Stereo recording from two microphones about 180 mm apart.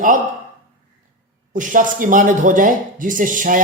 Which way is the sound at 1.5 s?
45° right (ahead or behind).